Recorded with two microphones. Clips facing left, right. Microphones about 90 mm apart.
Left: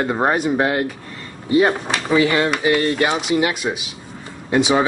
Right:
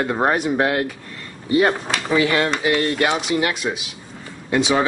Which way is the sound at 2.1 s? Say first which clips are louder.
Left 2 dB; 5° left (ahead or behind).